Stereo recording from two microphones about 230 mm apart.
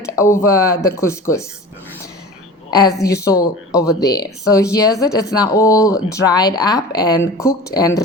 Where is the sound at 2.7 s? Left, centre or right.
Centre.